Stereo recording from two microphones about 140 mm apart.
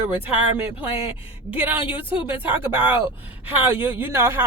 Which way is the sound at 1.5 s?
10° right (ahead or behind).